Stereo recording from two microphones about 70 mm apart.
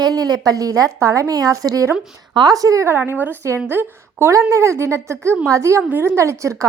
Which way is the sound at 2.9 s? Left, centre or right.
Right.